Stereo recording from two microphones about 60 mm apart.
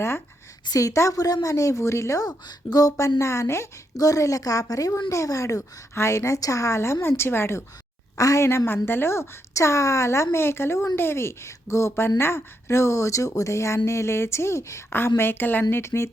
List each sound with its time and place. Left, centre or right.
0.7 s a woman's voice: left
2.7 s a woman's voice: left
3.9 s a woman's voice: left
5.9 s speech: left
8.1 s a woman's voice: left
8.4 s speech: left
14.8 s a woman's voice: left
15.8 s speech: left